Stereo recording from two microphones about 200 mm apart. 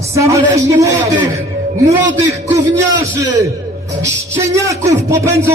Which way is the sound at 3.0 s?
15° right (ahead or behind).